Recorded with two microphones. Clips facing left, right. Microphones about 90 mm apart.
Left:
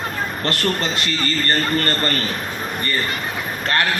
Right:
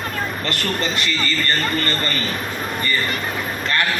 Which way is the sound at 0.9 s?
40° left (ahead or behind).